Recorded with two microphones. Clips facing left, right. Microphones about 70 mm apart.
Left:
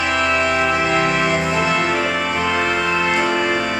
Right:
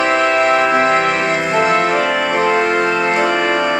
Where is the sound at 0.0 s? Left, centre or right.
Right.